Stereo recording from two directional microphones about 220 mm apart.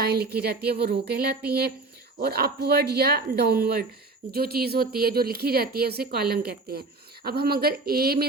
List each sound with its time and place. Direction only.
0.0 s a woman's voice: 45° right (ahead or behind)